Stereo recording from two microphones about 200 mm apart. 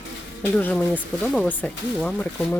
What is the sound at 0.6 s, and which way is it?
Speech, 5° left (ahead or behind).